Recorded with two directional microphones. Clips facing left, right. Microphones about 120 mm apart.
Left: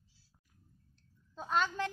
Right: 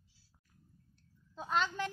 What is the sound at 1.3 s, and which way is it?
Speech, centre (ahead or behind).